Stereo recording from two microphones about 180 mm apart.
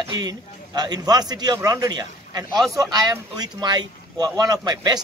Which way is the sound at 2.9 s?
20° right (ahead or behind).